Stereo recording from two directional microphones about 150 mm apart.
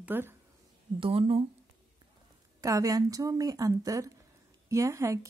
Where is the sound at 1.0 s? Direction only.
35° right (ahead or behind).